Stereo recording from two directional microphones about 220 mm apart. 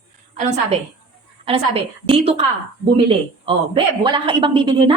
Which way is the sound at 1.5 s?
25° right (ahead or behind).